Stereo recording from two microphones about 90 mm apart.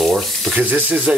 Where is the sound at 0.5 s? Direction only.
20° right (ahead or behind).